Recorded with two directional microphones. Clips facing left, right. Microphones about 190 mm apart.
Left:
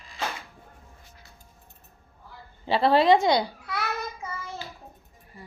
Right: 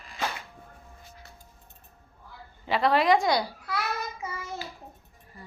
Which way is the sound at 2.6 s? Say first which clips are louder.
Left 3 dB; 30° left (ahead or behind).